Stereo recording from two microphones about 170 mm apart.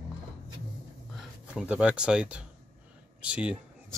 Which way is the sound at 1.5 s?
5° right (ahead or behind).